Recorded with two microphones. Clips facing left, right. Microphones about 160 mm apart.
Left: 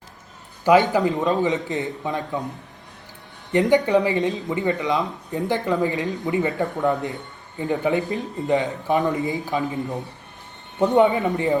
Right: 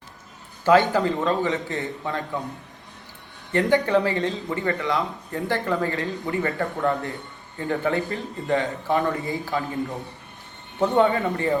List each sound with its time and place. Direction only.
0.6 s a man's voice: 15° left (ahead or behind)
3.5 s speech: 20° left (ahead or behind)